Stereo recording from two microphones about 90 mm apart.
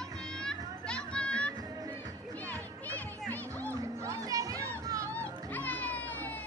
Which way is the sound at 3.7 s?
40° right (ahead or behind).